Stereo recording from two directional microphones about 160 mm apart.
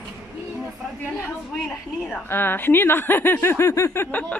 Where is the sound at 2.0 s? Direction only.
15° left (ahead or behind).